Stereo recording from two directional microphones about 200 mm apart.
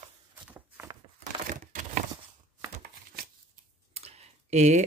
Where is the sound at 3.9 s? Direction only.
30° right (ahead or behind).